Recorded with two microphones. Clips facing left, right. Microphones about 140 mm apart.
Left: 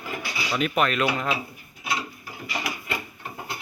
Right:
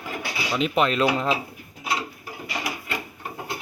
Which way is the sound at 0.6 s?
25° right (ahead or behind).